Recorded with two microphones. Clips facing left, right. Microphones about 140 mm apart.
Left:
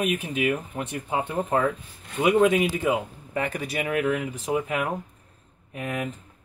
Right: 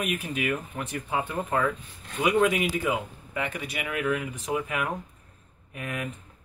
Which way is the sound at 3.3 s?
40° left (ahead or behind).